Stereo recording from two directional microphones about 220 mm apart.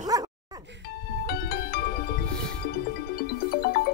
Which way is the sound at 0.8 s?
45° left (ahead or behind).